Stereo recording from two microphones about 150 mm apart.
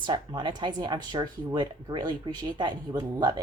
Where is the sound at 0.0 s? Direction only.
30° right (ahead or behind).